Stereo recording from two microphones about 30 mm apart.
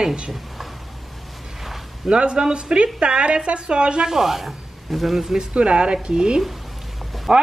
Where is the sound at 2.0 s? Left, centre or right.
Right.